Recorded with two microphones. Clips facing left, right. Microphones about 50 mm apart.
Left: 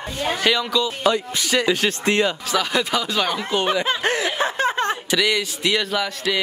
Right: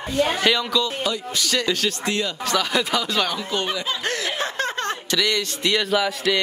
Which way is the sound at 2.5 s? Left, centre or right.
Centre.